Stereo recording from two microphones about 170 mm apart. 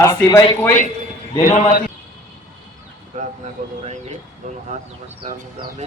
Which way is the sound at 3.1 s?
45° right (ahead or behind).